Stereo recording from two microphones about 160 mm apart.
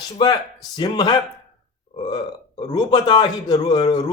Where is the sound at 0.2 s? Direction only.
30° left (ahead or behind).